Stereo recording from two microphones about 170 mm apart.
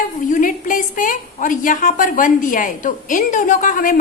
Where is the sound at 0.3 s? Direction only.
50° left (ahead or behind).